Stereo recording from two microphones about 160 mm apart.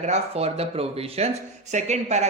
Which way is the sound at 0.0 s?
40° right (ahead or behind).